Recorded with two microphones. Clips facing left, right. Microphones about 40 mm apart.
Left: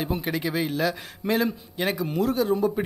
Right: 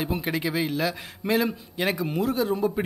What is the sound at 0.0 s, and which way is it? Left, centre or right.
Speech, right.